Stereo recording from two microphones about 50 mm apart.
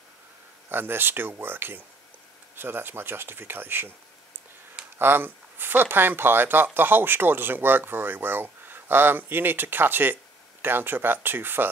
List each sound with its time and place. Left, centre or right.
0.7 s speech: right
4.9 s speech: right